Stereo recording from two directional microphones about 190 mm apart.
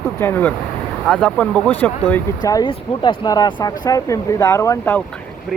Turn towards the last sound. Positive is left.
turn(degrees=15)  # may be behind; listen again after turning